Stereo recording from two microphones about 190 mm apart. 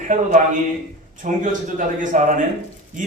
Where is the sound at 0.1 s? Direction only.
45° right (ahead or behind).